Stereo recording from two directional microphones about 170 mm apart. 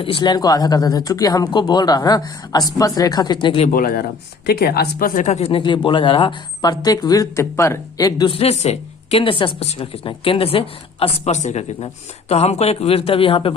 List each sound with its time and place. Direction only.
0.0 s speech: 30° left (ahead or behind)
3.7 s speech: 55° left (ahead or behind)
4.4 s speech: 70° left (ahead or behind); by 13.6 s 35° left (ahead or behind)